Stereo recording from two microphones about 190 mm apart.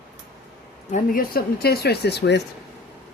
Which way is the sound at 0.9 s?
50° left (ahead or behind).